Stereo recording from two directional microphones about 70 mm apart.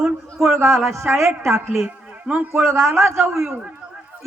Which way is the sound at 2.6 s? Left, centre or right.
Right.